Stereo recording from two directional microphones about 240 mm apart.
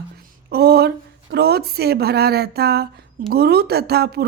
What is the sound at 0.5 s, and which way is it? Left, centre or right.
A woman's voice, right.